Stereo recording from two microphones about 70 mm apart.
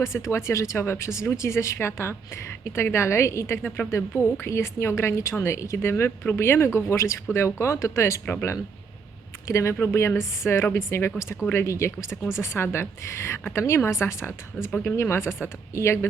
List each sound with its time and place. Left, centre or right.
0.0 s speech: left
8.3 s speech: left
9.5 s speech: left